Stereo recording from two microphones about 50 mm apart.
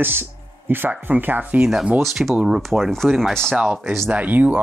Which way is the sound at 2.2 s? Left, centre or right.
Centre.